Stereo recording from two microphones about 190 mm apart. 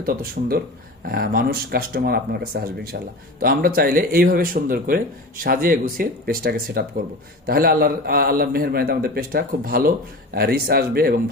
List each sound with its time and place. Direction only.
0.0 s a man's voice: 50° right (ahead or behind)